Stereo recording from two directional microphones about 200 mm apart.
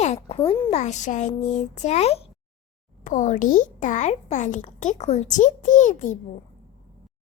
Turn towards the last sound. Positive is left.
turn(degrees=40)  # may be behind; listen again after turning